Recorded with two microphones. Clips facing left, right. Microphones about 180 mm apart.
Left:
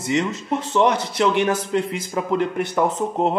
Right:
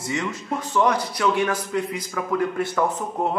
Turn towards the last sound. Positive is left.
turn(degrees=20)  # may be behind; listen again after turning